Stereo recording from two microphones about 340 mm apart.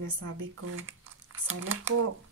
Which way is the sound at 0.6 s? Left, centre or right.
Right.